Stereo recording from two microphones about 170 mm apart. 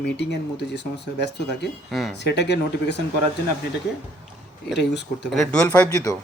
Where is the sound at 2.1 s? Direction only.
90° left.